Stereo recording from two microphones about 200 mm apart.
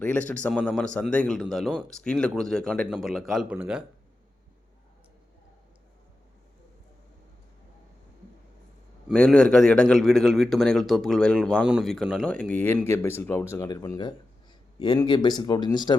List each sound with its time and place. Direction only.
0.0 s a man's voice: 5° left (ahead or behind)
9.0 s a man's voice: 5° left (ahead or behind); by 16.0 s 20° left (ahead or behind)